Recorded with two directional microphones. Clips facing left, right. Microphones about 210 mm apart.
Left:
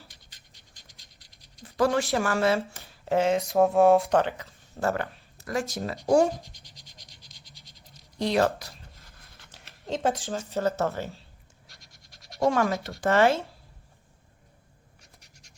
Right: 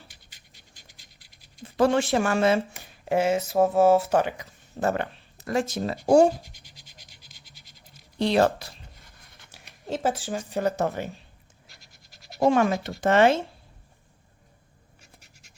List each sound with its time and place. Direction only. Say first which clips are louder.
0.9 s pant: right 1 dB; centre (ahead or behind)
1.6 s speech: right 3 dB; 25° right (ahead or behind)
6.5 s scratch: even; 5° right (ahead or behind)
8.2 s speech: right 3 dB; 30° right (ahead or behind)
9.0 s zipper: even; 5° right (ahead or behind)
10.2 s speech: right 1 dB; 15° right (ahead or behind)
11.7 s scratch: even; centre (ahead or behind)
12.4 s speech: right 3 dB; 25° right (ahead or behind)